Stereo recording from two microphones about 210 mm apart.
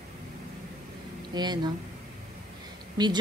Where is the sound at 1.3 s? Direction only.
20° right (ahead or behind).